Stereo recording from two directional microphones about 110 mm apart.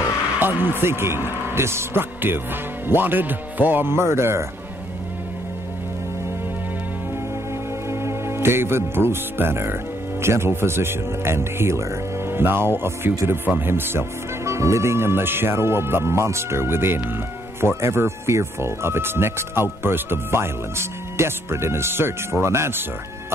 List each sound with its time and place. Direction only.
0.4 s speech: 20° right (ahead or behind)
7.9 s speech: 25° right (ahead or behind)